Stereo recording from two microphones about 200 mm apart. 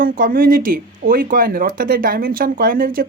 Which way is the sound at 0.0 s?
45° right (ahead or behind).